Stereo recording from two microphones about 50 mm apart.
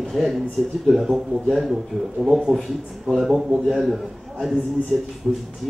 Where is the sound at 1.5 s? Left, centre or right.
Centre.